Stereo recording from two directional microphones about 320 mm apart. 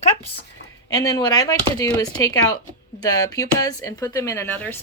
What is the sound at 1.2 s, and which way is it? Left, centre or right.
Speech, centre.